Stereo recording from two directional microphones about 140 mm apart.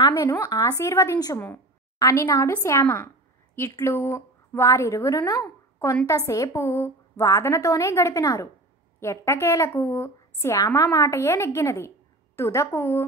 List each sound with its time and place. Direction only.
0.1 s a woman's voice: 20° left (ahead or behind)